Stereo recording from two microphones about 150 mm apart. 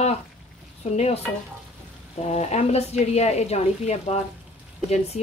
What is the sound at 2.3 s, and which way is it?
Speech, 45° left (ahead or behind).